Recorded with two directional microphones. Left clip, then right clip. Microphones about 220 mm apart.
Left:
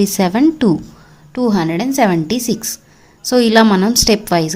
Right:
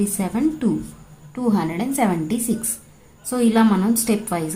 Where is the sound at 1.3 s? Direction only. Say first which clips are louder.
Left 6 dB; 35° left (ahead or behind).